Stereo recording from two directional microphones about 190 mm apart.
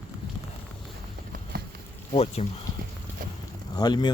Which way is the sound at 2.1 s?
30° left (ahead or behind).